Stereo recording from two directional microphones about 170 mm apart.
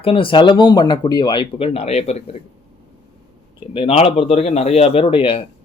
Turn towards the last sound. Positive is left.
turn(degrees=30)  # may be behind; listen again after turning